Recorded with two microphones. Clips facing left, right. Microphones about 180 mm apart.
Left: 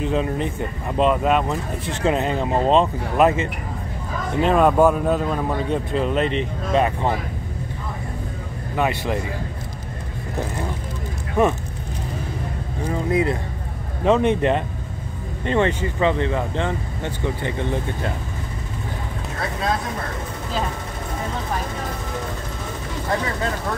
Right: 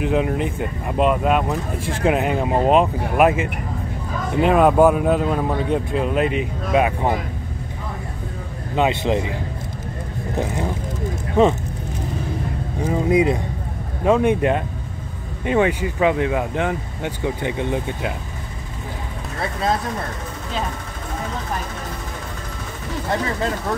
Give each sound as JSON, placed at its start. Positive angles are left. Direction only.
{"t": 0.0, "sound": "speech", "side_deg": -15}
{"t": 8.7, "sound": "speech", "side_deg": -20}
{"t": 12.8, "sound": "speech", "side_deg": -15}